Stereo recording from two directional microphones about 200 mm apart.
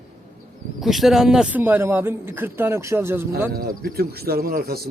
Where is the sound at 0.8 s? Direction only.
Centre (ahead or behind).